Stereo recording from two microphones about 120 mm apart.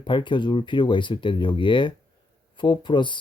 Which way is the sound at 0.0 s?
40° left (ahead or behind).